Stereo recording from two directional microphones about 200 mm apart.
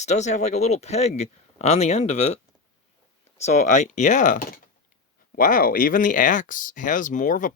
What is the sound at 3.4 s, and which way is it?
Speech, 35° left (ahead or behind).